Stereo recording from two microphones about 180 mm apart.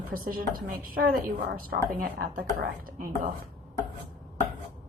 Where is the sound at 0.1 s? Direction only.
55° right (ahead or behind).